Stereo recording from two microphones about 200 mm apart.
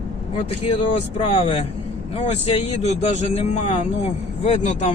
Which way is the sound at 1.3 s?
30° left (ahead or behind).